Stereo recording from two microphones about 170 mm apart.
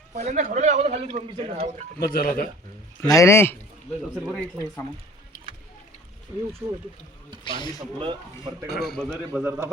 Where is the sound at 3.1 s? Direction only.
15° left (ahead or behind).